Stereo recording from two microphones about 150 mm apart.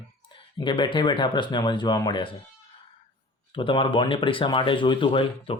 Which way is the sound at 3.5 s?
35° left (ahead or behind).